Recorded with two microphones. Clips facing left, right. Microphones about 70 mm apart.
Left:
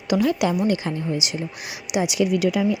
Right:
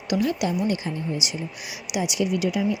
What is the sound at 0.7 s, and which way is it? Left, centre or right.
Speech, left.